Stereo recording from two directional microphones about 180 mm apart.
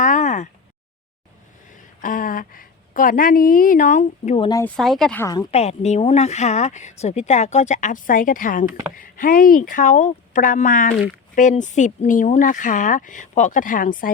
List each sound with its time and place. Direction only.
0.0 s a sound: 45° left (ahead or behind)
1.7 s a woman's voice: 50° left (ahead or behind)
4.6 s speech: centre (ahead or behind)
5.2 s a woman's voice: 15° left (ahead or behind)
5.5 s speech: 35° left (ahead or behind)